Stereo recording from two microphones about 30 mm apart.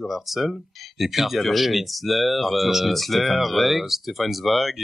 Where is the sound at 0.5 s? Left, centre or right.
Centre.